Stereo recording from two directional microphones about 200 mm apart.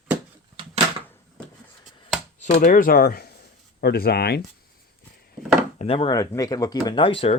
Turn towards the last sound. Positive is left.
turn(degrees=25)  # may be behind; listen again after turning